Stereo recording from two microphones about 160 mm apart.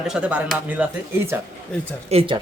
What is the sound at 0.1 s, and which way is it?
Speech, 10° right (ahead or behind).